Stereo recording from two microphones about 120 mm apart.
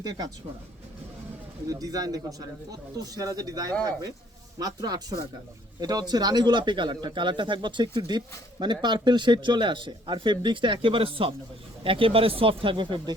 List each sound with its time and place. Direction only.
0.0 s speech: 35° right (ahead or behind)
1.6 s speech: 30° right (ahead or behind)